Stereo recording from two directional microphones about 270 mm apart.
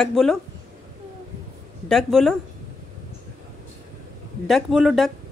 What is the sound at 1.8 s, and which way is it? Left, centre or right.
Speech, centre.